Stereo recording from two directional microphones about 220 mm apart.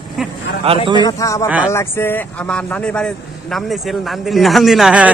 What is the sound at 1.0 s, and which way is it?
Speech, 15° left (ahead or behind).